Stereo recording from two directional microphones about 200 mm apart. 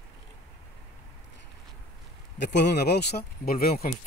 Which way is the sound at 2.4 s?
60° left (ahead or behind).